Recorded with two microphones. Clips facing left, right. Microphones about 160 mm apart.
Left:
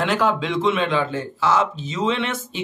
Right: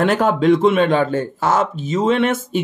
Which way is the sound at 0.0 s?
50° right (ahead or behind).